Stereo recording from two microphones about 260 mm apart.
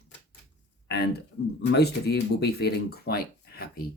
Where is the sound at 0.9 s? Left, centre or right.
Left.